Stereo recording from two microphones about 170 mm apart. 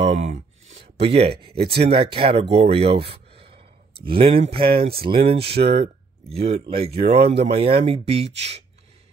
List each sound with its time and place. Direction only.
0.0 s speech: 40° right (ahead or behind)